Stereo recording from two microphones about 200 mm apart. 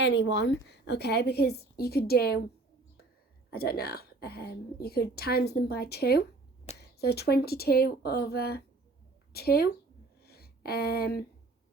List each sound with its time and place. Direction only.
0.0 s a woman's voice: 60° left (ahead or behind)
3.5 s a woman's voice: 50° left (ahead or behind)